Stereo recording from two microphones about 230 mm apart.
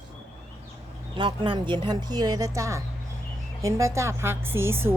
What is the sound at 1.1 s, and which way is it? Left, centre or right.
A woman's voice, right.